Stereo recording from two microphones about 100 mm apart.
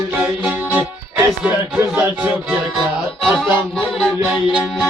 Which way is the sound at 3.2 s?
Centre (ahead or behind).